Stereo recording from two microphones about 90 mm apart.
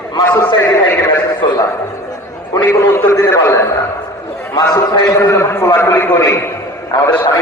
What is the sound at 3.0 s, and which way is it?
A man's voice, 35° left (ahead or behind).